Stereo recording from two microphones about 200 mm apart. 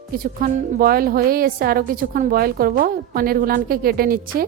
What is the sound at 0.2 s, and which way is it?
A woman's voice, 45° right (ahead or behind).